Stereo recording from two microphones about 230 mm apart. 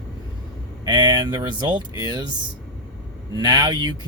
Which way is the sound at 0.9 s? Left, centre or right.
Centre.